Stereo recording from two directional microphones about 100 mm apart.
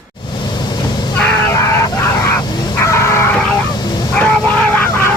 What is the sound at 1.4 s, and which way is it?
Vehicle, 25° left (ahead or behind).